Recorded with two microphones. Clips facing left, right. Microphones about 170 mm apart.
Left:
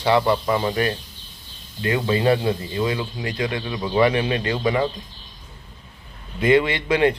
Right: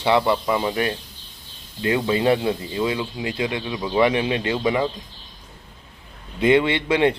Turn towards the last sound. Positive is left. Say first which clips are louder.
# even
turn(degrees=-25)  # may be behind; listen again after turning